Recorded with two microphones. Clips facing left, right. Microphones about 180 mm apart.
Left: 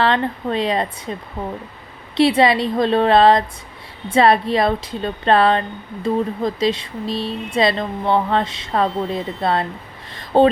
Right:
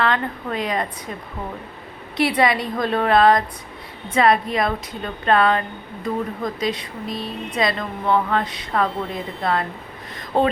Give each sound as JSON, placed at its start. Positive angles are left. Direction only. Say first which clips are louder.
{"t": 0.0, "sound": "speech", "louder": "left 4 dB", "side_deg": 30}
{"t": 2.1, "sound": "speech", "louder": "left 4 dB", "side_deg": 25}